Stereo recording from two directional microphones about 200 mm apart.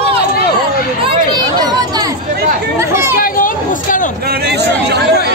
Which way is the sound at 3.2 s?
45° left (ahead or behind).